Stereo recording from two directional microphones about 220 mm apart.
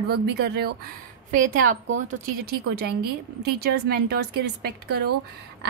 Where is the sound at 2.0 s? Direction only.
45° right (ahead or behind).